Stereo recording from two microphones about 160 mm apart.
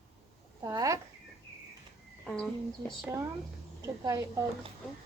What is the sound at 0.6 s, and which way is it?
Speech, 20° right (ahead or behind).